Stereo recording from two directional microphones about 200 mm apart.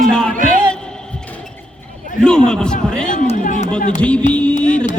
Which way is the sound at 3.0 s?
40° left (ahead or behind).